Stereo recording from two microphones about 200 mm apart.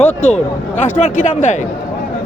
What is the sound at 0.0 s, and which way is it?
Speech, 35° left (ahead or behind).